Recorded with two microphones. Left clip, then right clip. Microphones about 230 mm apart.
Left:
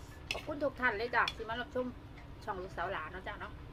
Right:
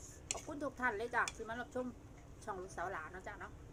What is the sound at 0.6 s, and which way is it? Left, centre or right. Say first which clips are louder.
A woman's voice: left 5 dB; centre.